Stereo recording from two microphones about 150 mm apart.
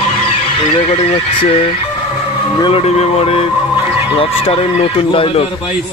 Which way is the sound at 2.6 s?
40° left (ahead or behind).